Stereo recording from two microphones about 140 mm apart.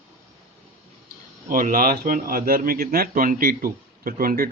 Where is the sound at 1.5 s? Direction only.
90° right.